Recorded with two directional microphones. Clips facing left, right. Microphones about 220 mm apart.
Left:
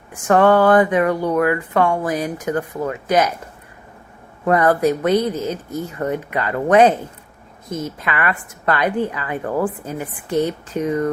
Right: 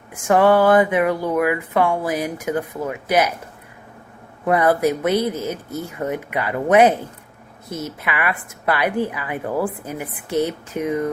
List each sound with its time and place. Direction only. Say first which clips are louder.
0.1 s a woman's voice: left 1 dB; 10° right (ahead or behind)
4.4 s a woman's voice: left 1 dB; 10° right (ahead or behind)